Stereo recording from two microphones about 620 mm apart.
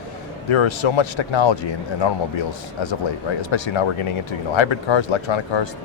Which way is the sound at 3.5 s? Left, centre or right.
Left.